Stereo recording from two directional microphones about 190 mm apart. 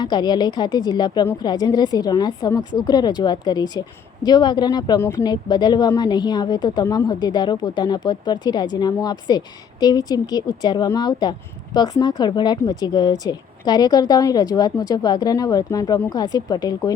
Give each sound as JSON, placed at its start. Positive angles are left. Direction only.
{"t": 0.0, "sound": "a woman's voice", "side_deg": 20}